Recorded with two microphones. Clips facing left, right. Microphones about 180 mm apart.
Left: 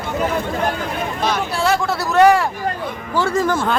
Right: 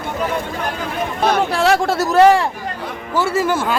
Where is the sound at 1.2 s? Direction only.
65° right (ahead or behind).